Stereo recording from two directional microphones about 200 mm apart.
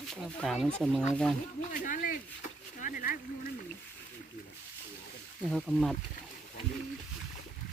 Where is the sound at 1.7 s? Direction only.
40° left (ahead or behind).